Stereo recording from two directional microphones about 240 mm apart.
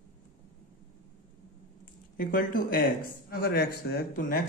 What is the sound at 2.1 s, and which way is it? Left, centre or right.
Speech, left.